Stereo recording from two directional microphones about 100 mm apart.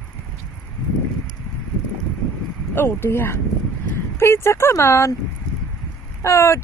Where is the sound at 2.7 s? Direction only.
25° left (ahead or behind).